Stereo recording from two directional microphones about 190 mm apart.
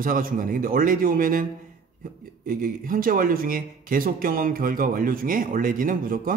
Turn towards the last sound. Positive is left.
turn(degrees=-45)  # may be behind; listen again after turning